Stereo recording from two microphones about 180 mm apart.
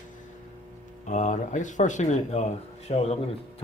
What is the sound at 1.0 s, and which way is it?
Speech, 40° left (ahead or behind).